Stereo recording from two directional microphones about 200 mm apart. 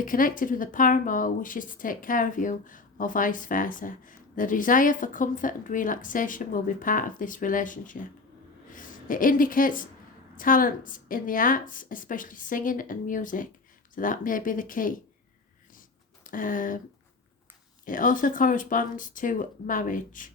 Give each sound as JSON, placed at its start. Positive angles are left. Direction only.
{"t": 0.0, "sound": "a woman's voice", "side_deg": 45}
{"t": 16.2, "sound": "speech", "side_deg": 40}
{"t": 17.8, "sound": "speech", "side_deg": 40}